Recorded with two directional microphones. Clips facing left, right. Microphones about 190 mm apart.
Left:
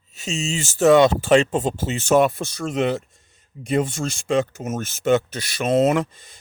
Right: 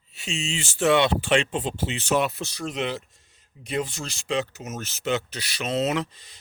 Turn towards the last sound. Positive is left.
turn(degrees=50)  # may be behind; listen again after turning